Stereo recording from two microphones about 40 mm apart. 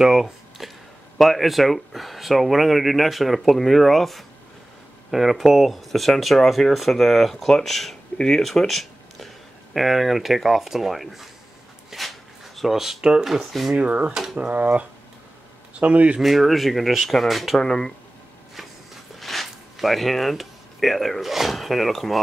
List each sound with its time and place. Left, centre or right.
0.0 s a sound: centre
1.1 s speech: centre
11.9 s a sound: centre
13.2 s speech: centre
13.7 s speech: right
16.2 s speech: centre
17.6 s speech: centre
19.1 s speech: centre